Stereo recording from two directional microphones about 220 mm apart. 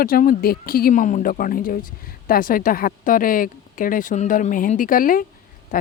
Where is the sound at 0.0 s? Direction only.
40° left (ahead or behind).